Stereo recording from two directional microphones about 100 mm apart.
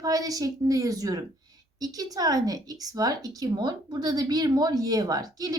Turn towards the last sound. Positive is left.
turn(degrees=-40)  # may be behind; listen again after turning